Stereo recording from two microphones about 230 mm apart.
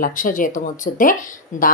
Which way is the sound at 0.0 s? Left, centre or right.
Left.